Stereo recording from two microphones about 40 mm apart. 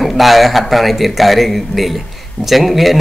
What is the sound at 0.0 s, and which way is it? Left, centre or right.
A man's voice, centre.